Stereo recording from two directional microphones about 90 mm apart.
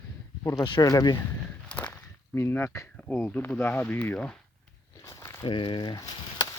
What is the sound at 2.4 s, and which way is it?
Speech, 30° left (ahead or behind).